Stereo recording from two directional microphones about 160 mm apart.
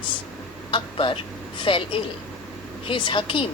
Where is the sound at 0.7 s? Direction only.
30° left (ahead or behind).